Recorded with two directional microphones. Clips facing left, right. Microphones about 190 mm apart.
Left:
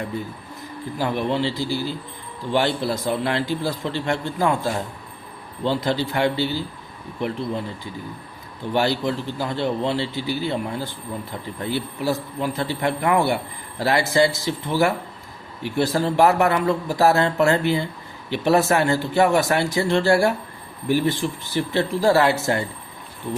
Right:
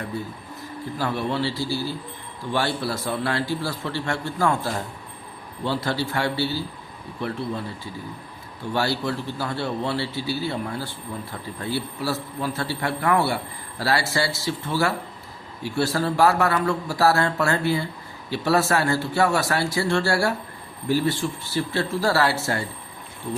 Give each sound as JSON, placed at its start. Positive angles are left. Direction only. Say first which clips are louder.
{"t": 0.9, "sound": "a man's voice", "louder": "left 3 dB", "side_deg": 15}
{"t": 8.7, "sound": "a man's voice", "louder": "left 3 dB", "side_deg": 20}